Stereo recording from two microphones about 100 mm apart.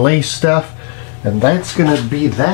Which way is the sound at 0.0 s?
15° left (ahead or behind).